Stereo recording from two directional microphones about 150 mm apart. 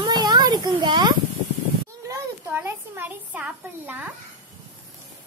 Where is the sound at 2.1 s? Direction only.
15° right (ahead or behind).